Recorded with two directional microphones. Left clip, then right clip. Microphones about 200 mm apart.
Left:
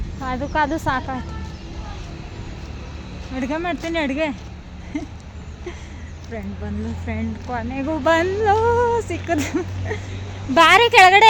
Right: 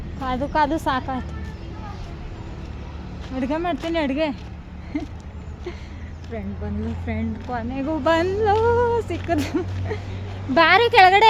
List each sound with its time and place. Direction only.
0.2 s speech: 5° right (ahead or behind)
3.3 s speech: 5° right (ahead or behind)
7.1 s speech: centre (ahead or behind)